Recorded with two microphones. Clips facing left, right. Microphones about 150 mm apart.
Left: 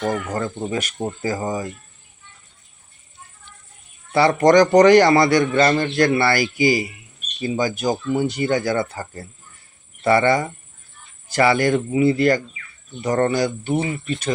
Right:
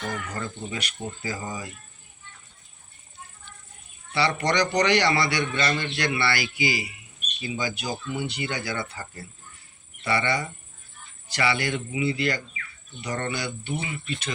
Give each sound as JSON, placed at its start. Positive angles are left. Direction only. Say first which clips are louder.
{"t": 0.3, "sound": "a man's voice", "louder": "left 9 dB", "side_deg": 45}
{"t": 4.1, "sound": "a man's voice", "louder": "left 11 dB", "side_deg": 45}